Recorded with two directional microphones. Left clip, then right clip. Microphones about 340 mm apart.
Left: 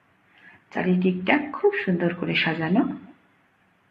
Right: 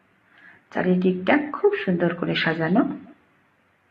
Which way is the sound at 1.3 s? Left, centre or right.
Centre.